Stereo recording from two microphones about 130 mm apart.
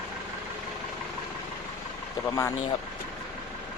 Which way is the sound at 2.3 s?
25° left (ahead or behind).